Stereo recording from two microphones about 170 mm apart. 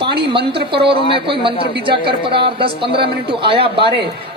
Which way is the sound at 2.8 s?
75° right (ahead or behind).